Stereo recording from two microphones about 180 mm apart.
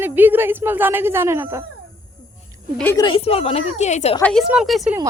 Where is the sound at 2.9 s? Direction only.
25° left (ahead or behind).